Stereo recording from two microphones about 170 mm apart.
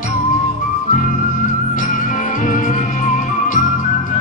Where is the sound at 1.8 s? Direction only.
50° left (ahead or behind).